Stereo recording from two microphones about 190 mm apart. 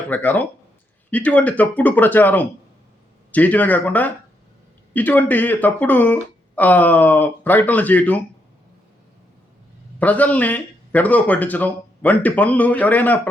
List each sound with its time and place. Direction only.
0.1 s a man's voice: 10° left (ahead or behind)
10.0 s a man's voice: 10° left (ahead or behind)